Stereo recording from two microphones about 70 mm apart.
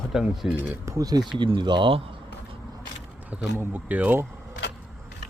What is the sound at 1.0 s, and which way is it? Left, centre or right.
Speech, right.